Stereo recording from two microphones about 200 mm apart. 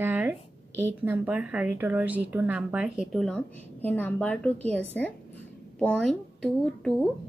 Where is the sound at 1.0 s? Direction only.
10° right (ahead or behind).